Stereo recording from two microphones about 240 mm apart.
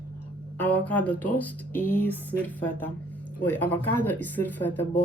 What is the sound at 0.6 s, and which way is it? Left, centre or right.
Speech, centre.